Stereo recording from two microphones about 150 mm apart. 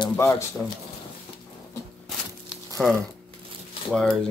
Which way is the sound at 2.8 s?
5° left (ahead or behind).